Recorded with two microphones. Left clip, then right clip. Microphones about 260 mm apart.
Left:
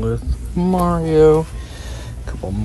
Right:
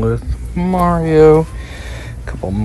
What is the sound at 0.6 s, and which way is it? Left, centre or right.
Speech, centre.